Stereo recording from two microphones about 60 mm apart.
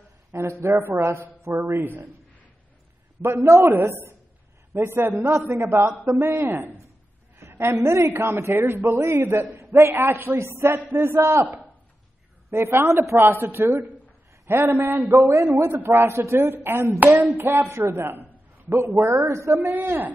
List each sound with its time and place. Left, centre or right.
0.3 s a woman's voice: right
3.2 s a man's voice: right
6.0 s a man's voice: right
7.3 s a woman's voice: right
12.4 s a woman's voice: right
15.1 s a woman's voice: right
17.0 s a man's voice: right
19.7 s a man's voice: right